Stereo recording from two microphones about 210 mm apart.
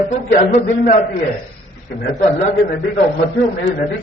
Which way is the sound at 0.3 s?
35° left (ahead or behind).